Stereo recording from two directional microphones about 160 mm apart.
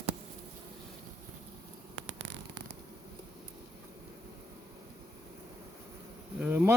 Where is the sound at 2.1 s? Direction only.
90° right.